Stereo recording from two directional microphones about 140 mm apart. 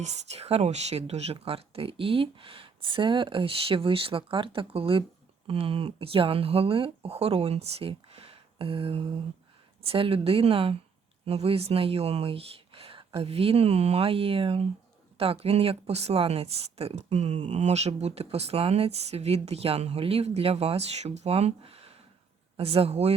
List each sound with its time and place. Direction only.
0.0 s speech: 50° right (ahead or behind)